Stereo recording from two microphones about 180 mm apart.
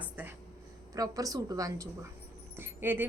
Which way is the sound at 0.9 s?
20° right (ahead or behind).